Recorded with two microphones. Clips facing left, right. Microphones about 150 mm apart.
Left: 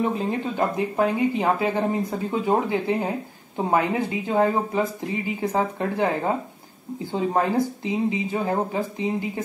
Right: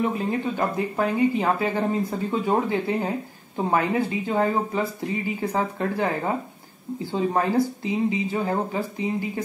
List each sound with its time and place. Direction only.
0.6 s speech: 15° left (ahead or behind)